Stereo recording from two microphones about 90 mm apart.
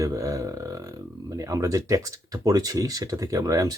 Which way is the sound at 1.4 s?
40° right (ahead or behind).